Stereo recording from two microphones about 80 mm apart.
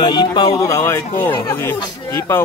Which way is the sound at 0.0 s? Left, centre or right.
Left.